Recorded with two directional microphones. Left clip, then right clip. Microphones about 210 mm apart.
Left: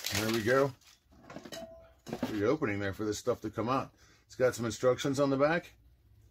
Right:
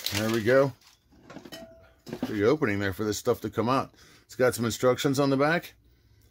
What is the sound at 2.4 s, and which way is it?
Speech, 50° right (ahead or behind).